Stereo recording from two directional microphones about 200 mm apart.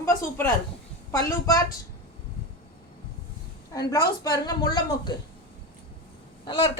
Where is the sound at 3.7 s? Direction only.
15° left (ahead or behind).